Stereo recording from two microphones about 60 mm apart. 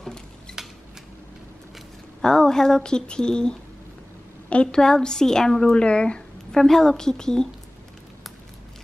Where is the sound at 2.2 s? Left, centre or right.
Centre.